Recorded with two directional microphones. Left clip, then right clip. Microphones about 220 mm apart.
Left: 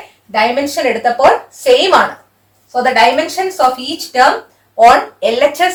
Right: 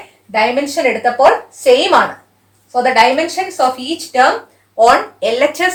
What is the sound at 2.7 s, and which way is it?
Speech, 15° right (ahead or behind).